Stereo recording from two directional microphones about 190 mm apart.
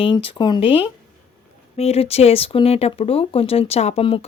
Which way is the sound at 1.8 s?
30° left (ahead or behind).